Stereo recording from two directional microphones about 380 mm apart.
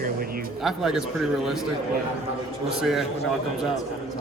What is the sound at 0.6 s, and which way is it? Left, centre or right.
Speech, centre.